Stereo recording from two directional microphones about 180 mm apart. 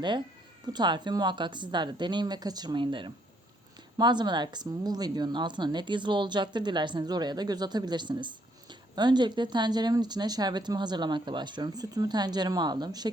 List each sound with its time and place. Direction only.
0.6 s speech: 25° right (ahead or behind)